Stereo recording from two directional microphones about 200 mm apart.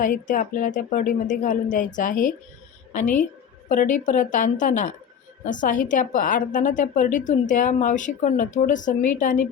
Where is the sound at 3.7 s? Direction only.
40° left (ahead or behind).